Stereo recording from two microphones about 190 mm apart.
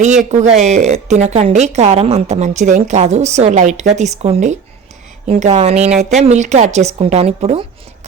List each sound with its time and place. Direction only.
0.0 s a woman's voice: 40° right (ahead or behind)